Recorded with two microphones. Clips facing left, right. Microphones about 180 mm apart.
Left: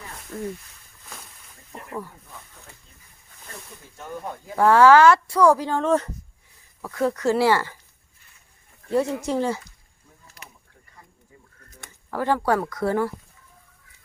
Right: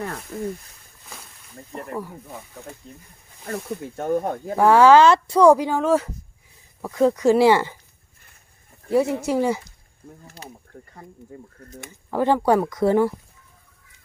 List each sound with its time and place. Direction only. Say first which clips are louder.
0.3 s speech: even; 15° right (ahead or behind)
2.9 s speech: right 12 dB; 60° right (ahead or behind)
4.5 s speech: right 1 dB; 15° right (ahead or behind)
6.8 s speech: right 5 dB; 15° right (ahead or behind)
8.9 s speech: right 3 dB; 10° right (ahead or behind)
10.5 s a sound: right 11 dB; 55° right (ahead or behind)
11.7 s speech: right 5 dB; 20° right (ahead or behind)